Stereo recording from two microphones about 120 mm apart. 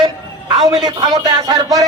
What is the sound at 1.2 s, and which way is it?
Speech, 35° right (ahead or behind).